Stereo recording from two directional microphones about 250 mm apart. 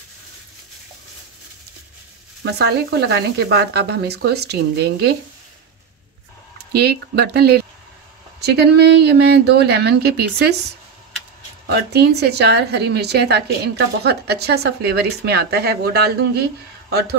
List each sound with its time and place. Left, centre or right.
2.4 s a woman's voice: right
6.7 s a woman's voice: right
11.6 s a woman's voice: right